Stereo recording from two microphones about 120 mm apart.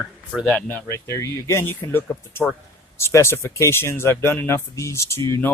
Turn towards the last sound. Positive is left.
turn(degrees=15)  # may be behind; listen again after turning